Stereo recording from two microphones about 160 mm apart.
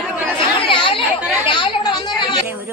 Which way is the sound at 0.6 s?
30° left (ahead or behind).